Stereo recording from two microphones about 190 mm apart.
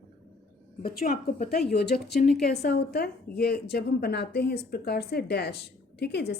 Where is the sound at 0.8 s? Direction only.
50° left (ahead or behind).